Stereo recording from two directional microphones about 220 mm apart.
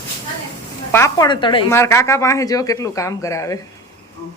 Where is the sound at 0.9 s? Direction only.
10° left (ahead or behind).